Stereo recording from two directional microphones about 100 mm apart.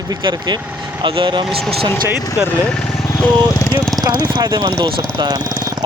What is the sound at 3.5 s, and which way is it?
Speech, 35° left (ahead or behind).